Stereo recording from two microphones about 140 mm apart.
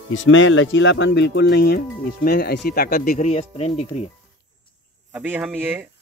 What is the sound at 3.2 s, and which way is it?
Speech, 50° left (ahead or behind).